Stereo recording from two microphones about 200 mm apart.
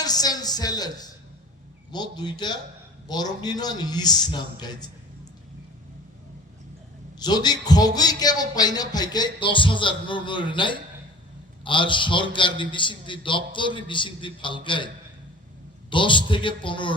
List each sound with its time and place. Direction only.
0.0 s a sound: 20° left (ahead or behind)
1.9 s speech: 20° left (ahead or behind)
7.2 s speech: 20° left (ahead or behind)
15.9 s speech: 25° left (ahead or behind)